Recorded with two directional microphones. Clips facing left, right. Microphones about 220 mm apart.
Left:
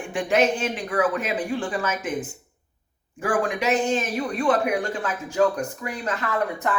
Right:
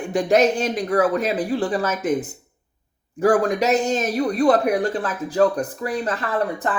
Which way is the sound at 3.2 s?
40° right (ahead or behind).